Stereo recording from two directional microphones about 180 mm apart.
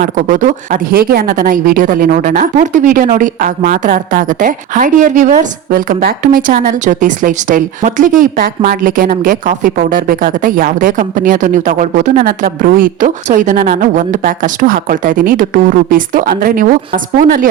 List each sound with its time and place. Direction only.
0.0 s speech: 45° right (ahead or behind)